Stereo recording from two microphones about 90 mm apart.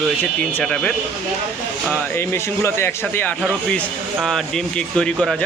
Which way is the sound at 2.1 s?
30° left (ahead or behind).